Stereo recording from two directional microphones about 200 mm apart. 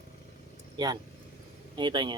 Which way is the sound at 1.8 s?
25° right (ahead or behind).